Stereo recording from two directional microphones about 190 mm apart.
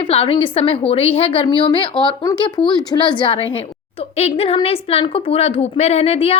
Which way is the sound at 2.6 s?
5° left (ahead or behind).